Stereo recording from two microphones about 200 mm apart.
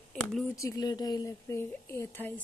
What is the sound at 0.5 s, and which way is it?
A woman's voice, 15° left (ahead or behind).